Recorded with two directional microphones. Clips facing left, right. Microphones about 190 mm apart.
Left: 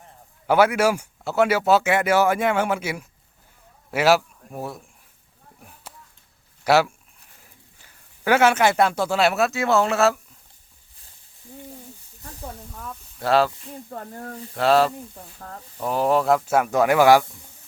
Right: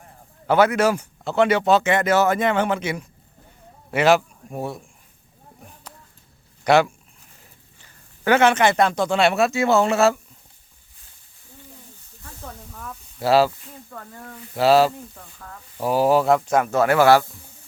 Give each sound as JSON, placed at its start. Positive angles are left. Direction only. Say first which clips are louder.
{"t": 0.4, "sound": "speech", "louder": "right 1 dB", "side_deg": 10}
{"t": 6.7, "sound": "speech", "louder": "right 2 dB", "side_deg": 5}
{"t": 12.4, "sound": "snake", "louder": "left 1 dB", "side_deg": 10}
{"t": 13.1, "sound": "speech", "louder": "right 2 dB", "side_deg": -5}
{"t": 13.9, "sound": "speech", "louder": "left 4 dB", "side_deg": 40}
{"t": 14.5, "sound": "speech", "louder": "right 2 dB", "side_deg": -5}
{"t": 15.4, "sound": "speech", "louder": "left 3 dB", "side_deg": 40}
{"t": 15.8, "sound": "speech", "louder": "right 3 dB", "side_deg": -5}